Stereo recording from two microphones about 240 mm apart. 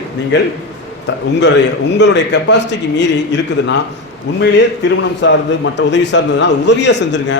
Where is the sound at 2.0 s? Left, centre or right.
Left.